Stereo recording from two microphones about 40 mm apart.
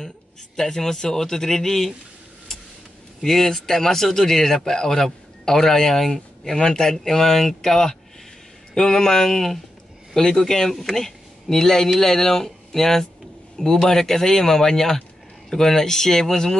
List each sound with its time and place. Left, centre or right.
0.6 s speech: centre
3.2 s speech: centre